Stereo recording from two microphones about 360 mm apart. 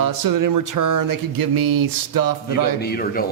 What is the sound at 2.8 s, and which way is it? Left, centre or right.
Speech, left.